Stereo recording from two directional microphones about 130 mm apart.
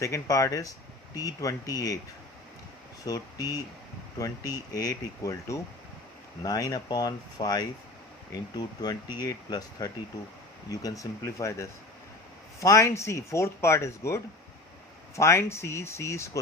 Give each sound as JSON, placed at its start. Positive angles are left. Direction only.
{"t": 0.0, "sound": "speech", "side_deg": 25}
{"t": 3.1, "sound": "speech", "side_deg": 25}